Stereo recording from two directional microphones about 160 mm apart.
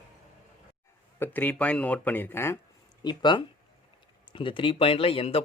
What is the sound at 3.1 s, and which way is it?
Speech, 30° left (ahead or behind).